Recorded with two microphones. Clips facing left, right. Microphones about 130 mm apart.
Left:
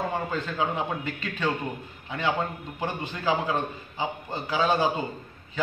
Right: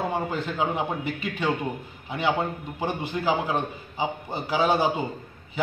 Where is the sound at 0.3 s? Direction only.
15° right (ahead or behind).